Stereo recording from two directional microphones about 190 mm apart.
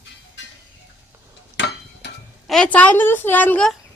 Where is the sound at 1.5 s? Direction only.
65° left (ahead or behind).